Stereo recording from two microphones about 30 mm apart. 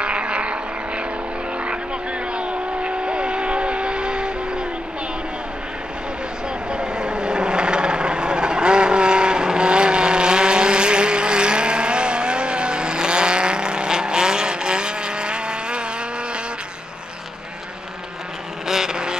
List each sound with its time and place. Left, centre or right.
0.0 s vehicle: right
2.3 s train: right
6.7 s vehicle: right
18.7 s vehicle: right